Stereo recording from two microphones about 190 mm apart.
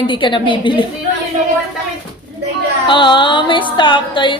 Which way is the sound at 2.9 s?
25° left (ahead or behind).